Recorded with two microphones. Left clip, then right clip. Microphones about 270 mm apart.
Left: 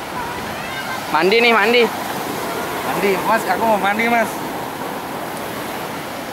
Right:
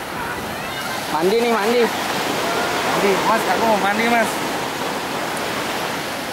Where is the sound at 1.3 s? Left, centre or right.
Centre.